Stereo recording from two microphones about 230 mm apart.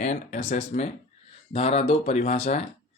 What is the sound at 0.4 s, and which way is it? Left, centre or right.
Speech, left.